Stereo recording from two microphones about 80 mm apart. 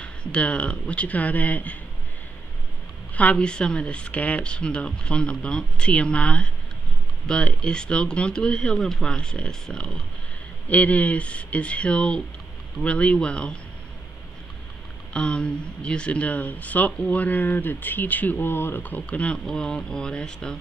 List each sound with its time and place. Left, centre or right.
0.0 s speech: centre
3.2 s speech: centre
15.1 s speech: centre